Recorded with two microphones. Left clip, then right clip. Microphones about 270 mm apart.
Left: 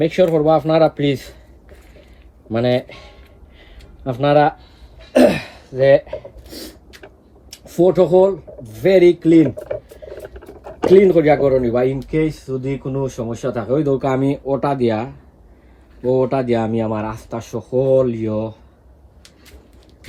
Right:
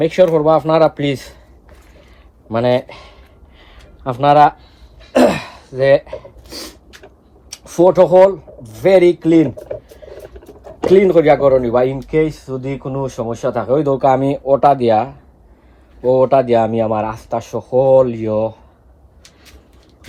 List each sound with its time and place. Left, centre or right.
0.0 s speech: centre
2.5 s speech: centre
3.6 s a sound: centre
5.1 s throat clearing: centre
7.6 s a man's voice: right
10.4 s a sound: centre
11.1 s speech: right
11.9 s speech: centre
16.1 s speech: centre